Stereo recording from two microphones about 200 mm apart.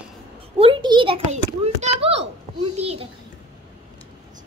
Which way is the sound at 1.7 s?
30° right (ahead or behind).